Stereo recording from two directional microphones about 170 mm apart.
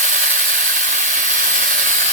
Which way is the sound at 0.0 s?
50° right (ahead or behind).